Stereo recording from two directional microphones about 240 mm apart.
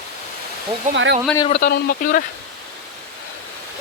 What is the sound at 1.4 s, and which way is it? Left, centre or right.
Speech, left.